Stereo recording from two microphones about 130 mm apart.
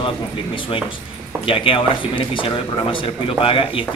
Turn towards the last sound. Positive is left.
turn(degrees=45)  # may be behind; listen again after turning